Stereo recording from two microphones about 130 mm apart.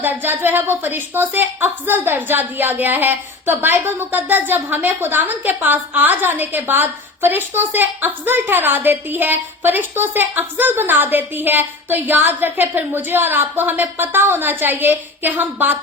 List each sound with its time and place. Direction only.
0.0 s a woman's voice: 15° right (ahead or behind)